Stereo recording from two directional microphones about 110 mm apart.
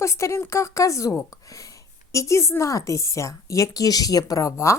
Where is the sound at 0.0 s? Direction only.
25° left (ahead or behind).